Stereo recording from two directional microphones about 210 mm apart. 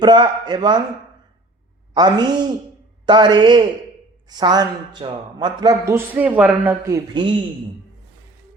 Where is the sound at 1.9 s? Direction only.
20° right (ahead or behind).